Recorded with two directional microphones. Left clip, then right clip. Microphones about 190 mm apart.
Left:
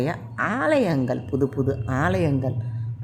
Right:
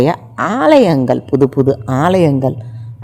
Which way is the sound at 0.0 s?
35° right (ahead or behind).